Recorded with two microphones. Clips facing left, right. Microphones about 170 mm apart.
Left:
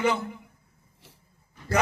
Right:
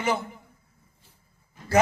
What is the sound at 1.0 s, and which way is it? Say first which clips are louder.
Dog: left 10 dB; 85° left.